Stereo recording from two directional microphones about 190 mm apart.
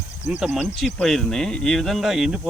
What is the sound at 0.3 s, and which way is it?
Speech, 5° right (ahead or behind).